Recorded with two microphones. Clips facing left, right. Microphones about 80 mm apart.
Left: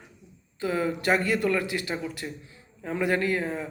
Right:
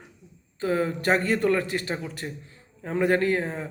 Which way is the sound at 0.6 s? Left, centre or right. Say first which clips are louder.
Right 2 dB; right.